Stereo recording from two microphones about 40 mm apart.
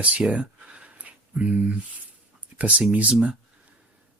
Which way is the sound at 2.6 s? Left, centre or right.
Right.